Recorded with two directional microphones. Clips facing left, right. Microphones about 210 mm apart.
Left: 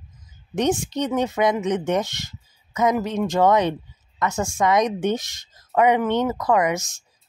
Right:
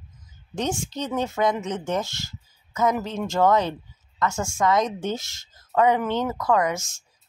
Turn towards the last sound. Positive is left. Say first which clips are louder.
# left 2 dB
turn(degrees=20)  # may be behind; listen again after turning